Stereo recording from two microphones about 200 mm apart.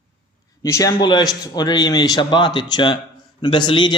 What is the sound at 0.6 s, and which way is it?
Speech, 15° left (ahead or behind).